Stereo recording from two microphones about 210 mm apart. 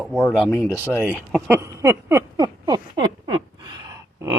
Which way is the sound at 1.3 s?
10° right (ahead or behind).